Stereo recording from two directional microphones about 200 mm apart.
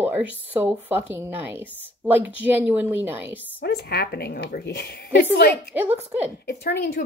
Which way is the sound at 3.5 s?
55° left (ahead or behind).